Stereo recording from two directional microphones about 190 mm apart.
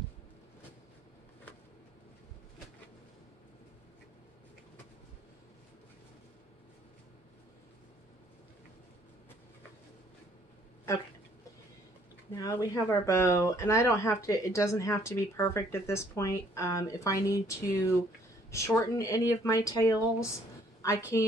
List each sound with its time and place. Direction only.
12.4 s speech: 20° left (ahead or behind)
18.9 s speech: 15° left (ahead or behind)